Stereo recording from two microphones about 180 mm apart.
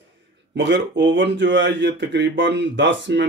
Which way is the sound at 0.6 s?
90° right.